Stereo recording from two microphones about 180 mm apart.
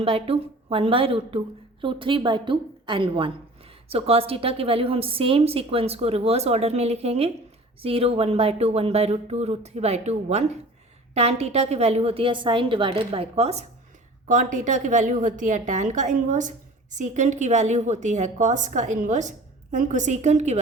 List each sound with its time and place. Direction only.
0.0 s a woman's voice: 30° right (ahead or behind)